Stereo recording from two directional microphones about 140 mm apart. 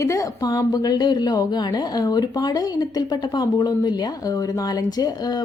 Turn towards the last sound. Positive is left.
turn(degrees=30)  # may be behind; listen again after turning